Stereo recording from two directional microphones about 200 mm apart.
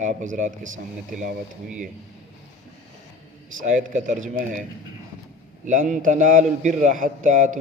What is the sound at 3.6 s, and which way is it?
A man's voice, 40° right (ahead or behind).